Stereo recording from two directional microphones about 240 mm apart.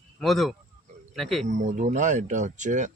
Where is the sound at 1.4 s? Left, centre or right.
Right.